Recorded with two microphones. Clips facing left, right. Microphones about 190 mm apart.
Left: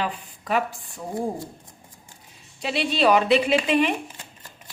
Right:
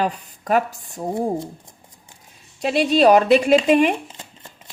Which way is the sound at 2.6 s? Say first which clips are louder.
Right 7 dB; 45° right (ahead or behind).